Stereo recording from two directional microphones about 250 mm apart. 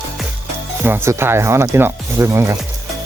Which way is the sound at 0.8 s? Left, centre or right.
Centre.